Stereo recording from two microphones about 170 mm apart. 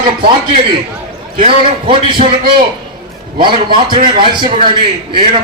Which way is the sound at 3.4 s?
30° right (ahead or behind).